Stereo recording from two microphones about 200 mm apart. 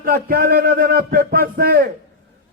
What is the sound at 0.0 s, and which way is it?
A man's voice, 45° right (ahead or behind).